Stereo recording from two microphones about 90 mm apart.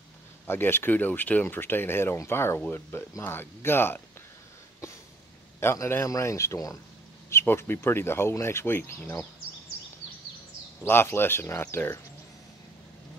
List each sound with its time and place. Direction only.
0.5 s speech: 25° left (ahead or behind)
5.6 s a man's voice: 30° left (ahead or behind)
10.8 s speech: 25° left (ahead or behind)